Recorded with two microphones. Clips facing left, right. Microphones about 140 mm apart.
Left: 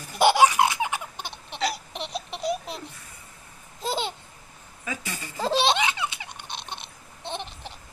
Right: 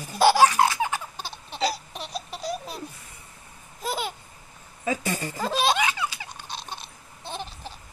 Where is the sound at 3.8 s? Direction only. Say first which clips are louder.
Left 1 dB; 25° left (ahead or behind).